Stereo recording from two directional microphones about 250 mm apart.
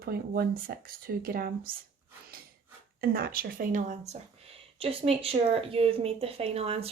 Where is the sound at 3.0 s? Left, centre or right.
Right.